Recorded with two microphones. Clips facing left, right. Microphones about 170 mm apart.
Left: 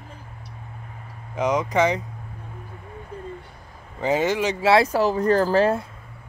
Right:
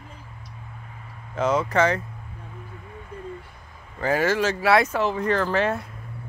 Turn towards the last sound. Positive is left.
turn(degrees=30)  # may be behind; listen again after turning